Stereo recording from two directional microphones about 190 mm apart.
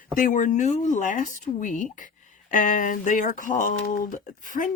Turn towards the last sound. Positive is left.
turn(degrees=45)  # may be behind; listen again after turning